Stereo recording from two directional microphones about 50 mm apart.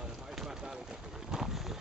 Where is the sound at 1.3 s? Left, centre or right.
Centre.